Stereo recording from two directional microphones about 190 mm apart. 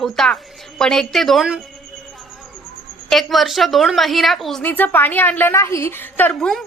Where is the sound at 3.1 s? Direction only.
Centre (ahead or behind).